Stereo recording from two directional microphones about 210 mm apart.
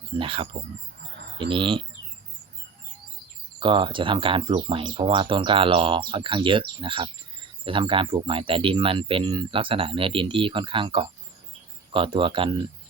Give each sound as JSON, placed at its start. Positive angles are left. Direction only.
{"t": 0.1, "sound": "speech", "side_deg": -25}
{"t": 3.6, "sound": "speech", "side_deg": -25}